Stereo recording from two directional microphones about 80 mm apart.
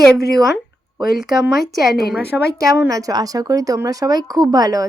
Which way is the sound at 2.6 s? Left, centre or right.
Right.